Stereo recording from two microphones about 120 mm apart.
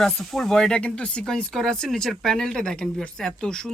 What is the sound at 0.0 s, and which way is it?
Speech, 5° left (ahead or behind).